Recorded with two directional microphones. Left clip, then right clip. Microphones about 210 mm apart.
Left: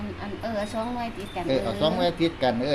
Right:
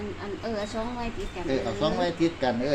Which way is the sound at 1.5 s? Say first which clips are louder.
Left 3 dB; 25° left (ahead or behind).